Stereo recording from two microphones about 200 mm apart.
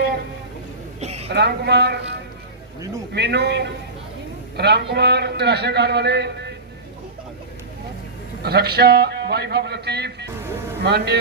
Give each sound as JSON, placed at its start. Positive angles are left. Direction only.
{"t": 1.0, "sound": "a sound", "side_deg": -30}
{"t": 1.3, "sound": "a man's voice", "side_deg": -55}
{"t": 3.1, "sound": "a man's voice", "side_deg": -55}
{"t": 8.4, "sound": "a man's voice", "side_deg": -50}